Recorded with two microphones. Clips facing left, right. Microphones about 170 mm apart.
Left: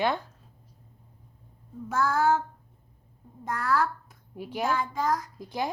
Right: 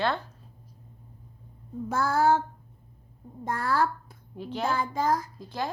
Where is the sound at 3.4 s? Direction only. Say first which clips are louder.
Even; 30° right (ahead or behind).